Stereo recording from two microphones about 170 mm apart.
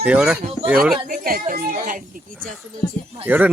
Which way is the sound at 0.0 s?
5° right (ahead or behind).